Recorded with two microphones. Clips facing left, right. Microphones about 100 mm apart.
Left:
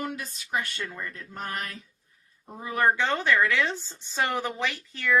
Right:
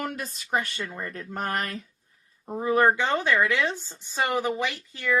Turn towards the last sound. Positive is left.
turn(degrees=-10)  # may be behind; listen again after turning